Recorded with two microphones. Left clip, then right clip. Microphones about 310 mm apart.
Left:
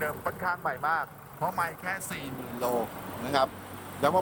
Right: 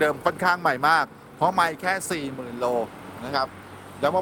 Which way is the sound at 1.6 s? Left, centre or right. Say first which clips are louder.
Right 9 dB; right.